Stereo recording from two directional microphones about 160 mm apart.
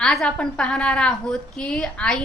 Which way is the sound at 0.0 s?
5° left (ahead or behind).